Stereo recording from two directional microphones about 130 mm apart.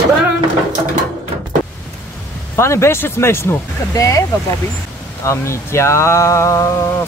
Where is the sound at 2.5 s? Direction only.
20° left (ahead or behind).